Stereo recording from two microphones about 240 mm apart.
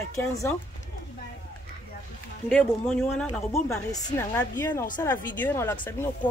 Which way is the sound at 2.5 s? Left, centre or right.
Centre.